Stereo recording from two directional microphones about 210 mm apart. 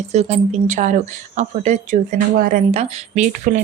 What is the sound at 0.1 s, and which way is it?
Speech, 30° right (ahead or behind).